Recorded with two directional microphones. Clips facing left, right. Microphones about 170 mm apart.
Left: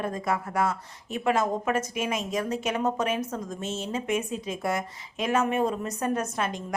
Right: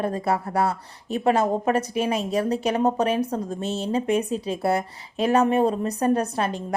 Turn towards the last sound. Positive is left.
turn(degrees=-35)  # may be behind; listen again after turning